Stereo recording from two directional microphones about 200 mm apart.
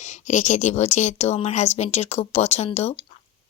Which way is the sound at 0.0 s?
35° left (ahead or behind).